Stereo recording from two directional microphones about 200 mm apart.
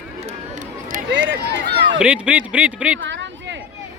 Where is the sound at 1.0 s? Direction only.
60° right (ahead or behind).